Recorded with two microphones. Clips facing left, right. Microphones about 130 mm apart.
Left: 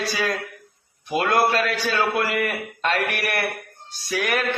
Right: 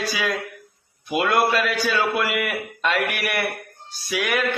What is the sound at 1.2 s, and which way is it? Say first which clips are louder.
Speech: even; 40° left (ahead or behind).